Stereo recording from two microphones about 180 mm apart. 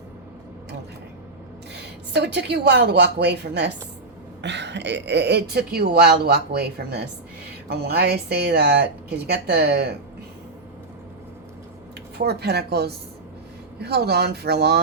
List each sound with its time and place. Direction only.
1.7 s a woman's voice: 70° right (ahead or behind)
12.1 s speech: 65° right (ahead or behind)